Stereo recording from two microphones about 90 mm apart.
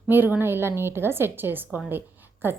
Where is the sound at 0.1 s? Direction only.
25° right (ahead or behind).